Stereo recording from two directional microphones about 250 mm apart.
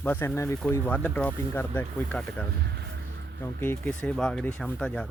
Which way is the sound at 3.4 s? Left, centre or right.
Centre.